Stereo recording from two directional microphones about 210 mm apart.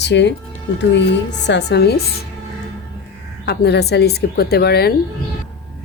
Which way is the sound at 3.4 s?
50° left (ahead or behind).